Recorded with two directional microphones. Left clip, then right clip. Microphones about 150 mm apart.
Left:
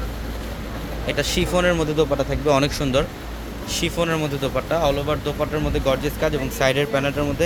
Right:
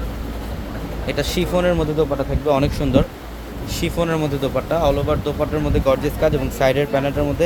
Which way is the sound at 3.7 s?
15° right (ahead or behind).